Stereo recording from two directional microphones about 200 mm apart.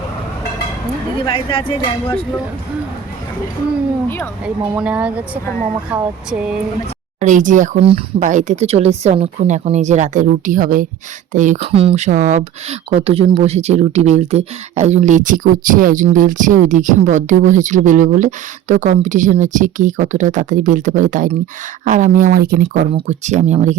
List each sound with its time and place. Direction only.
1.2 s speech: 25° left (ahead or behind)
4.4 s speech: 5° right (ahead or behind)
7.2 s speech: 40° right (ahead or behind)